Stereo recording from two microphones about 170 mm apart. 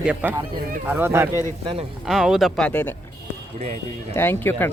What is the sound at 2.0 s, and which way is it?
Speech, centre (ahead or behind).